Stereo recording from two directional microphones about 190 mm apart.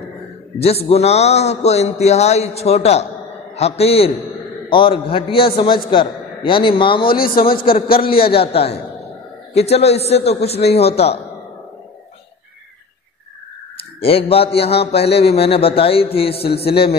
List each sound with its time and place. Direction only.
0.6 s a man's voice: 30° left (ahead or behind)
7.1 s speech: 50° left (ahead or behind)
8.0 s a man's voice: 30° left (ahead or behind)
14.0 s a man's voice: 30° left (ahead or behind)